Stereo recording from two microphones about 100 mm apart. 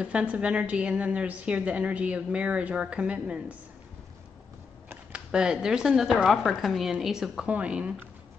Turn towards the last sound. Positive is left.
turn(degrees=-10)  # may be behind; listen again after turning